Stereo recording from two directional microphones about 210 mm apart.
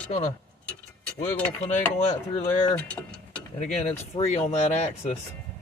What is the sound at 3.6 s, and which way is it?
Speech, 30° left (ahead or behind).